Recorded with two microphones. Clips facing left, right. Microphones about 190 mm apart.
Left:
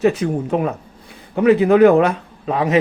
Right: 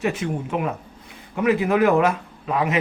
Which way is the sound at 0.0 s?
35° left (ahead or behind).